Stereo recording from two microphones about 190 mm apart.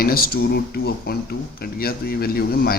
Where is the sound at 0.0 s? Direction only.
55° left (ahead or behind).